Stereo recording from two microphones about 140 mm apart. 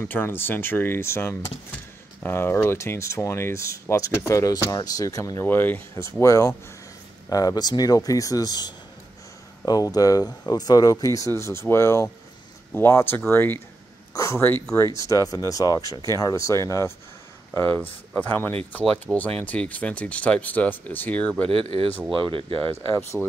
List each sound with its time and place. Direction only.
0.0 s speech: 15° left (ahead or behind)
21.5 s speech: 45° right (ahead or behind)
22.7 s speech: 15° left (ahead or behind)